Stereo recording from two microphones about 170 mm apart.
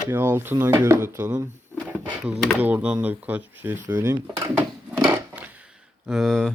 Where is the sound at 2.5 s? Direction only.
10° right (ahead or behind).